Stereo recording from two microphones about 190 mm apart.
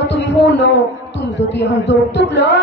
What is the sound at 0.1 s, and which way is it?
A man's voice, 65° left (ahead or behind).